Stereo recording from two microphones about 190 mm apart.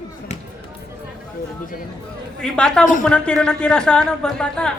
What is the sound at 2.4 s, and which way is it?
A woman's voice, 5° left (ahead or behind).